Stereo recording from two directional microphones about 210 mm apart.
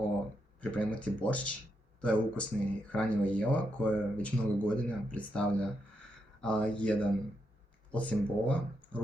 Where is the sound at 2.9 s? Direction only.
5° left (ahead or behind).